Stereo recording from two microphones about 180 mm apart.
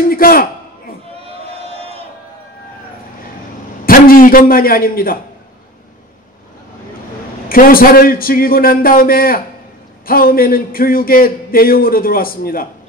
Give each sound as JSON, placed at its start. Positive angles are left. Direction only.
{"t": 0.1, "sound": "a sound", "side_deg": 55}
{"t": 1.8, "sound": "crowd", "side_deg": -35}
{"t": 3.8, "sound": "a man's voice", "side_deg": 55}
{"t": 7.4, "sound": "a man's voice", "side_deg": 55}